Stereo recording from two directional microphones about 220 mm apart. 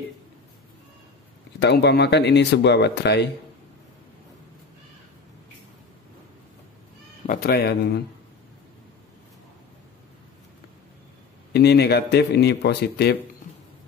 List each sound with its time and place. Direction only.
1.6 s speech: 50° left (ahead or behind)
7.2 s speech: 45° left (ahead or behind)
11.5 s speech: 50° left (ahead or behind)